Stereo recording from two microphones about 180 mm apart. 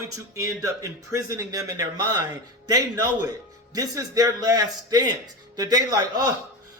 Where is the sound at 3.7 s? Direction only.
20° right (ahead or behind).